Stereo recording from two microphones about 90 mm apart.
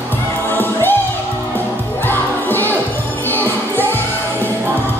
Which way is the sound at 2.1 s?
25° left (ahead or behind).